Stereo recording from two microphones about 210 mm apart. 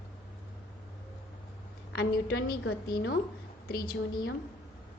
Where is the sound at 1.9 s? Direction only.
50° left (ahead or behind).